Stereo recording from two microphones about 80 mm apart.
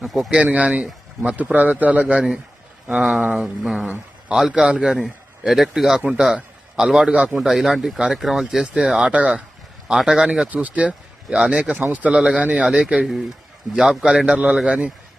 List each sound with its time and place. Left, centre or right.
0.0 s speech: centre
0.3 s a man's voice: centre
7.1 s speech: centre
7.3 s speech: centre
11.8 s speech: centre
12.1 s speech: centre
12.4 s speech: centre
12.6 s speech: centre